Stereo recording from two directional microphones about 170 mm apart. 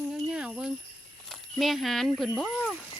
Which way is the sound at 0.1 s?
5° right (ahead or behind).